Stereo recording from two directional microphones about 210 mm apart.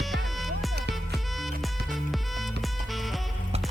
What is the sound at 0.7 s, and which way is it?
Music, 50° right (ahead or behind).